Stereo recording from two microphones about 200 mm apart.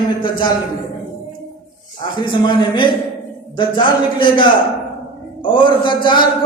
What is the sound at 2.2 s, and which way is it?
A woman's voice, 25° left (ahead or behind).